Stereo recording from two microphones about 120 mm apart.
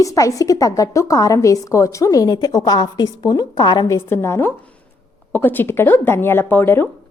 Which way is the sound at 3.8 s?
20° left (ahead or behind).